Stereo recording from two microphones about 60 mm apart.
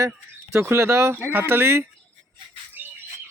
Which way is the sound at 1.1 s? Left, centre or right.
Right.